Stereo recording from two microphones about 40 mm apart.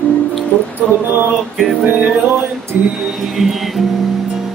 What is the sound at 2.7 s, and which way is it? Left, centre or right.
Music, right.